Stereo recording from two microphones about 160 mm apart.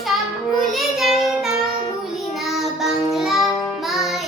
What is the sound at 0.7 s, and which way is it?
Child singing, centre (ahead or behind).